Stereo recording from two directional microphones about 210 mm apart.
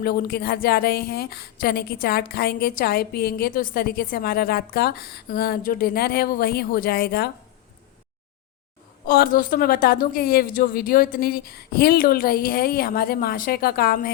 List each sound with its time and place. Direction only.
0.0 s speech: 45° left (ahead or behind)
9.0 s speech: 45° left (ahead or behind)